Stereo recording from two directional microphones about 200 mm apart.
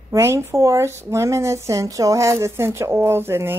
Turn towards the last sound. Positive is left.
turn(degrees=-10)  # may be behind; listen again after turning